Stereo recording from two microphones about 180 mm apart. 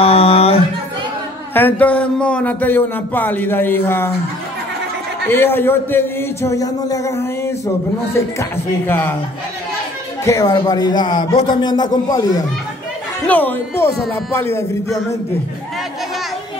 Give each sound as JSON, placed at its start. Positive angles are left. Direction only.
{"t": 0.0, "sound": "a sound", "side_deg": 35}
{"t": 1.5, "sound": "speech", "side_deg": 10}
{"t": 5.3, "sound": "speech", "side_deg": 10}
{"t": 10.2, "sound": "speech", "side_deg": 20}
{"t": 13.3, "sound": "speech", "side_deg": 10}